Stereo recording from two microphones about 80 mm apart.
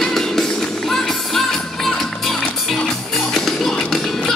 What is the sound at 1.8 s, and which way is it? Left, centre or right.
Music, centre.